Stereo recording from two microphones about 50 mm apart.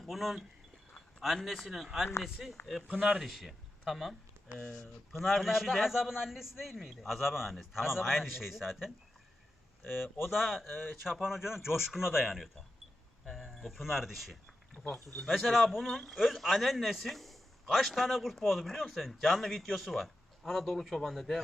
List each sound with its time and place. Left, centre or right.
0.0 s a man's voice: centre
1.7 s a man's voice: centre
2.9 s speech: right
3.2 s a man's voice: centre